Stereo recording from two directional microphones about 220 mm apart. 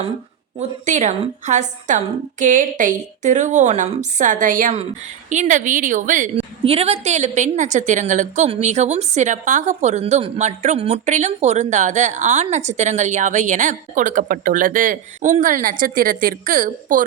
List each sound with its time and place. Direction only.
0.9 s a woman's voice: 30° right (ahead or behind)